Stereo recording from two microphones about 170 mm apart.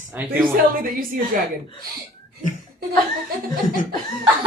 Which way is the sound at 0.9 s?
55° right (ahead or behind).